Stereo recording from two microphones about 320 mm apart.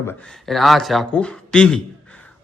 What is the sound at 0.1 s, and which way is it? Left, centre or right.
Speech, centre.